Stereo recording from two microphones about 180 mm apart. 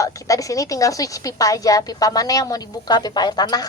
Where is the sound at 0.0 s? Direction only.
20° left (ahead or behind).